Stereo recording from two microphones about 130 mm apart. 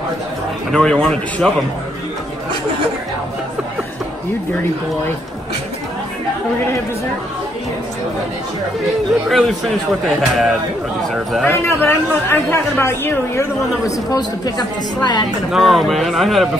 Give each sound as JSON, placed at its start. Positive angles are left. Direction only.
{"t": 0.7, "sound": "speech", "side_deg": 5}
{"t": 9.3, "sound": "speech", "side_deg": 0}
{"t": 11.4, "sound": "speech", "side_deg": 20}
{"t": 15.5, "sound": "speech", "side_deg": 0}